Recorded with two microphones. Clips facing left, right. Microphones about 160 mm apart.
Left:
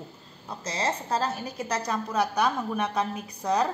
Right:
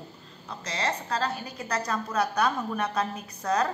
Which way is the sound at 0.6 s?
25° left (ahead or behind).